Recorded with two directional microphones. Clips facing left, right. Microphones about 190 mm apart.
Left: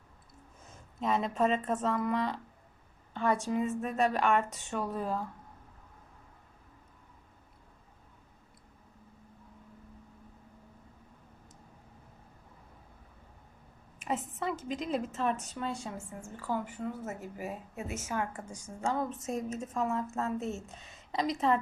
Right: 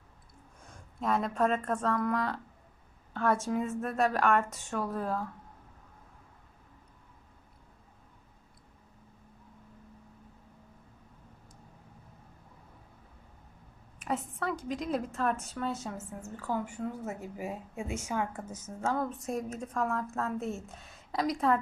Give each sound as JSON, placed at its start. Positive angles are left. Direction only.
{"t": 0.7, "sound": "a sound", "side_deg": 0}
{"t": 1.4, "sound": "speech", "side_deg": 20}
{"t": 1.6, "sound": "a woman's voice", "side_deg": 5}
{"t": 14.0, "sound": "a woman's voice", "side_deg": 0}
{"t": 16.2, "sound": "a woman's voice", "side_deg": 10}